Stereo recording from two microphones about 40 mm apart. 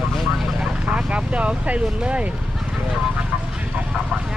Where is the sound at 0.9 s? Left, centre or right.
Right.